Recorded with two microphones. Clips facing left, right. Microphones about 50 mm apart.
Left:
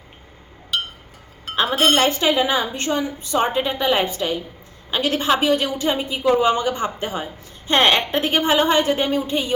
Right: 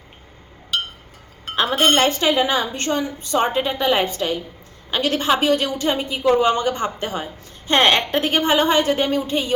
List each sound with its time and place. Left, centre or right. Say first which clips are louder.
0.7 s chink: even; centre
1.5 s a woman's voice: even; centre